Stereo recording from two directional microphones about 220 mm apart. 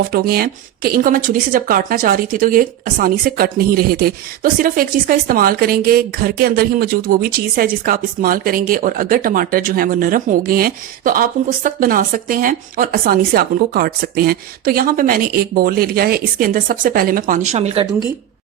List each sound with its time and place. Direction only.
0.1 s a woman's voice: 45° right (ahead or behind)